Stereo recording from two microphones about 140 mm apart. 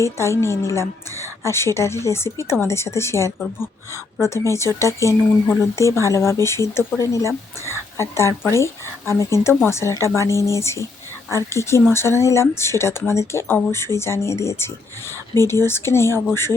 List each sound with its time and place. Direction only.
0.0 s speech: 20° left (ahead or behind)